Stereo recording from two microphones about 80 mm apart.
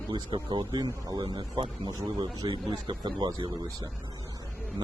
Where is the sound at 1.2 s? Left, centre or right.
Right.